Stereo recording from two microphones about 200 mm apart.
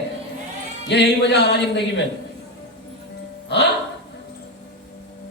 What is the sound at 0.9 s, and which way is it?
A man's voice, 60° left (ahead or behind).